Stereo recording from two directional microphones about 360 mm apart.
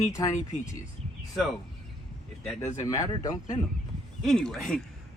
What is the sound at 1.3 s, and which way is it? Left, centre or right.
Speech, centre.